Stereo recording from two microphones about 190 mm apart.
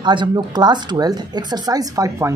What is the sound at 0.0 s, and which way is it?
Speech, 25° right (ahead or behind).